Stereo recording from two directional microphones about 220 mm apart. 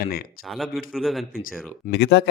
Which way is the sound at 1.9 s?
55° left (ahead or behind).